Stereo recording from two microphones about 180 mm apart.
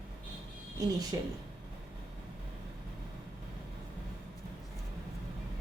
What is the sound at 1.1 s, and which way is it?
Speech, 20° right (ahead or behind).